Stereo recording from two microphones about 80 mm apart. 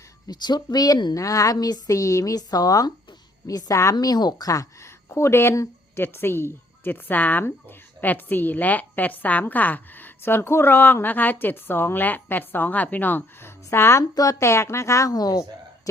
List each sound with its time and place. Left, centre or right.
0.3 s speech: left
1.1 s a woman's voice: left
3.9 s speech: left
5.0 s a woman's voice: left
14.2 s speech: left
15.1 s a woman's voice: left